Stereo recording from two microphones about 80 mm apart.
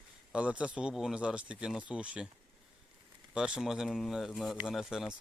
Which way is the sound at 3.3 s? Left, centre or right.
Centre.